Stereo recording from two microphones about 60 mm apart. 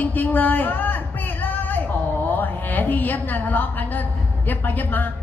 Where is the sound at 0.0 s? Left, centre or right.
Left.